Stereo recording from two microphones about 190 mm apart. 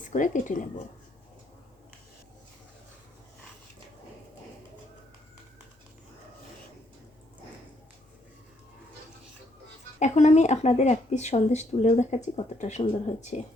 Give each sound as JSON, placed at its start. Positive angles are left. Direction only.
{"t": 0.1, "sound": "speech", "side_deg": 40}
{"t": 10.0, "sound": "speech", "side_deg": 40}